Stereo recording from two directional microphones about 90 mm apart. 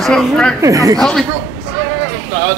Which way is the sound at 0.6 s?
40° right (ahead or behind).